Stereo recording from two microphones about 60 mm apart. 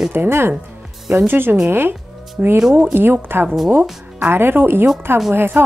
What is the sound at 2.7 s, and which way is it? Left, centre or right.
A woman's voice, right.